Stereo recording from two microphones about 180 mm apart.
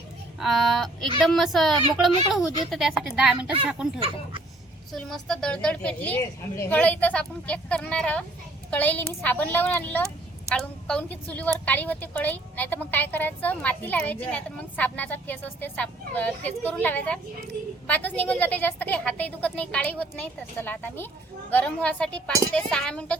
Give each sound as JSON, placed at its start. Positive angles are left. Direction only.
{"t": 0.3, "sound": "speech", "side_deg": 0}
{"t": 4.0, "sound": "speech", "side_deg": -30}
{"t": 4.9, "sound": "a woman's voice", "side_deg": 0}